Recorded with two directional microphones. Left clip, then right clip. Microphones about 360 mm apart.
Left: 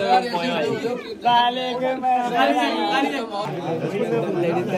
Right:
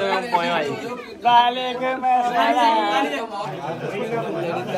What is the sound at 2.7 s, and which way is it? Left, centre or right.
Speech, centre.